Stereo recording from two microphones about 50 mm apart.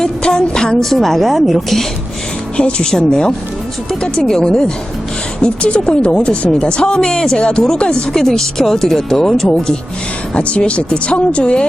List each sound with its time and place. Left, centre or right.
0.0 s a woman's voice: centre
2.6 s speech: centre
10.3 s speech: left